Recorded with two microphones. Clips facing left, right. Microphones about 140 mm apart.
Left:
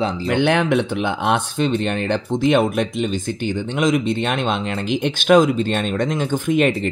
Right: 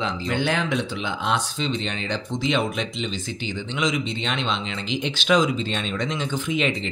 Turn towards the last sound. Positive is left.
turn(degrees=50)  # may be behind; listen again after turning